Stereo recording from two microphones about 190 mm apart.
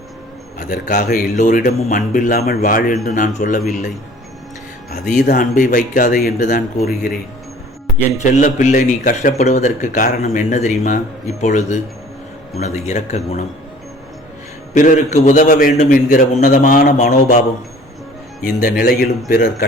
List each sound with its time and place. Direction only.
0.7 s a man's voice: 45° left (ahead or behind)
4.9 s a man's voice: 45° left (ahead or behind)
8.2 s speech: 40° left (ahead or behind)
14.7 s a man's voice: 40° left (ahead or behind)
18.4 s a man's voice: 50° left (ahead or behind)